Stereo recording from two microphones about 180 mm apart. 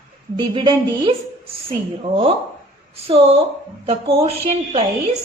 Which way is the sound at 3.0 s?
30° right (ahead or behind).